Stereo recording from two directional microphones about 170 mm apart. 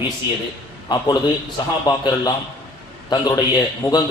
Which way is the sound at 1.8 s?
25° left (ahead or behind).